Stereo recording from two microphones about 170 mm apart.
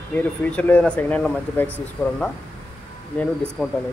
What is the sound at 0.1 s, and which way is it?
Speech, 10° left (ahead or behind).